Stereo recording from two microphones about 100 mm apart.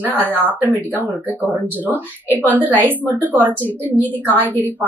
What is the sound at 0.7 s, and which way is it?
Speech, 15° right (ahead or behind).